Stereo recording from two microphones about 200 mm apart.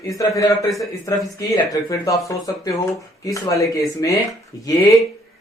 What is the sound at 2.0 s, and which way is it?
Speech, 15° left (ahead or behind).